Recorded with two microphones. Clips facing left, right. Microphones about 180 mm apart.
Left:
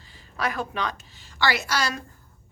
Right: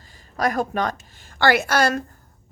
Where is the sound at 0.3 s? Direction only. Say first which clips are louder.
Right 6 dB; 45° right (ahead or behind).